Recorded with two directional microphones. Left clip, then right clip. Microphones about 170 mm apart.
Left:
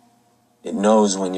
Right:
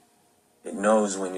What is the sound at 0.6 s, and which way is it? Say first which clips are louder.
Speech: left 6 dB; 90° left.